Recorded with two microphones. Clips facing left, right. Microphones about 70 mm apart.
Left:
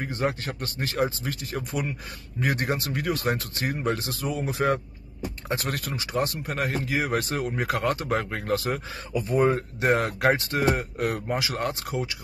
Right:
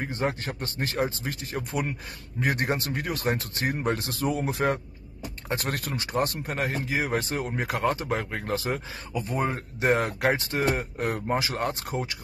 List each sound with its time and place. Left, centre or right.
0.2 s speech: right
4.2 s speech: right
6.4 s speech: right
9.1 s speech: right